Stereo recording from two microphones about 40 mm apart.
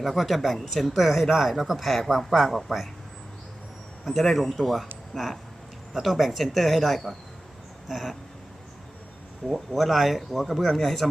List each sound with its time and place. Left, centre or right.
0.0 s speech: centre
4.0 s a man's voice: centre
9.5 s speech: centre